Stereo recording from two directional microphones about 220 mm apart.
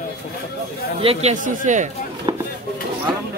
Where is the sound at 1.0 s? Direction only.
30° right (ahead or behind).